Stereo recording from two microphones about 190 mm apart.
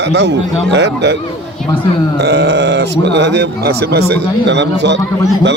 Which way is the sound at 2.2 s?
60° right (ahead or behind).